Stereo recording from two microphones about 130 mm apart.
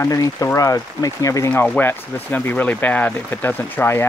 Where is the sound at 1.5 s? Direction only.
10° left (ahead or behind).